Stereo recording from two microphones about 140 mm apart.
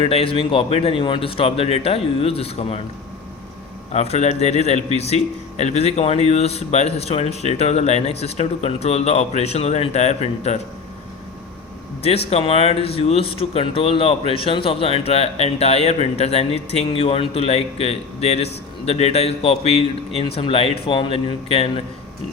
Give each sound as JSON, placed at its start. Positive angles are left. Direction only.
{"t": 0.0, "sound": "speech", "side_deg": 45}
{"t": 3.9, "sound": "speech", "side_deg": 50}
{"t": 12.0, "sound": "speech", "side_deg": 45}